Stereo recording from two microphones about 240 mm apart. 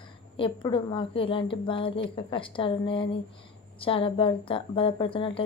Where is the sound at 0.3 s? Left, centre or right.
Left.